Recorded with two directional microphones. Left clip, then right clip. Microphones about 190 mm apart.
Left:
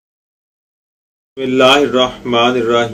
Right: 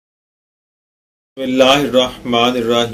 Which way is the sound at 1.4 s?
50° right (ahead or behind).